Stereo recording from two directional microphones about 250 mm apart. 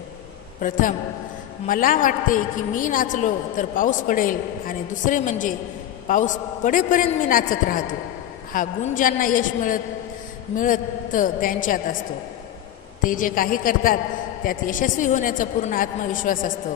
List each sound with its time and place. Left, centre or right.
0.6 s a woman's voice: left
13.0 s a woman's voice: left